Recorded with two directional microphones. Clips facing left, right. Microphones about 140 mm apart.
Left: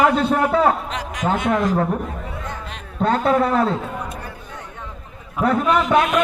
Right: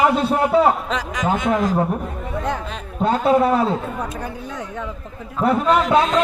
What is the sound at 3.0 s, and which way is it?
Speech, 25° right (ahead or behind).